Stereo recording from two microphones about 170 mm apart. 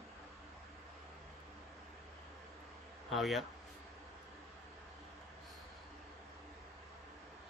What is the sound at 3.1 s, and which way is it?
Speech, centre (ahead or behind).